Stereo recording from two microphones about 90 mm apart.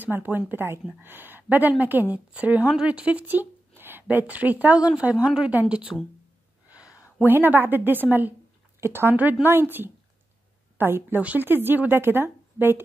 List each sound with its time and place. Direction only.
0.0 s a woman's voice: 20° right (ahead or behind)
7.2 s a woman's voice: 20° right (ahead or behind)